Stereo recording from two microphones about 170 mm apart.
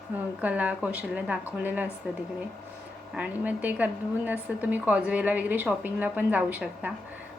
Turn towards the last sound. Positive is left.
turn(degrees=-10)  # may be behind; listen again after turning